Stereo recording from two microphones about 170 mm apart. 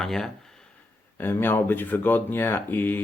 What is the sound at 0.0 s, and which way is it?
Speech, centre (ahead or behind).